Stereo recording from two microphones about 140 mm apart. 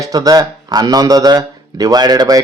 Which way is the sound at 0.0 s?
25° right (ahead or behind).